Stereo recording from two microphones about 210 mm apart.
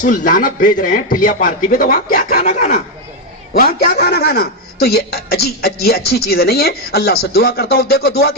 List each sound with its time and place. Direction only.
0.0 s a man's voice: 40° left (ahead or behind)